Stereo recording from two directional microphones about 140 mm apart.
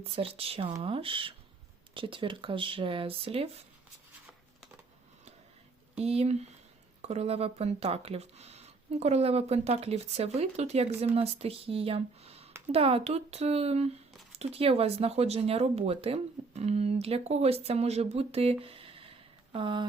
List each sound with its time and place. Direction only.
0.0 s speech: 45° right (ahead or behind)
5.9 s speech: 45° right (ahead or behind)